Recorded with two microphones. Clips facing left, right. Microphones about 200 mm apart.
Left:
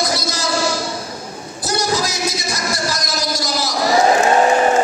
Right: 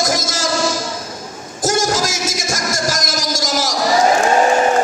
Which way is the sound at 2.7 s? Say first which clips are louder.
Right 2 dB; 90° right.